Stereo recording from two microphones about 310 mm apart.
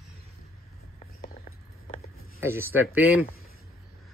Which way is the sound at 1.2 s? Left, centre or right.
Left.